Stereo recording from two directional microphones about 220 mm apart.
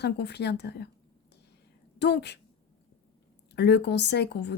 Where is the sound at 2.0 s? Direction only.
50° left (ahead or behind).